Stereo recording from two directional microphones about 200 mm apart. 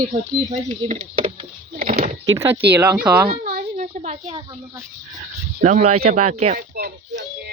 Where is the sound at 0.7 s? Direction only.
30° right (ahead or behind).